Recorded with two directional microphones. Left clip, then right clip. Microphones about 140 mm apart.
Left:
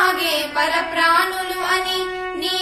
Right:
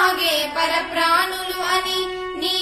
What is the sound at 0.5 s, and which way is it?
Music, 15° right (ahead or behind).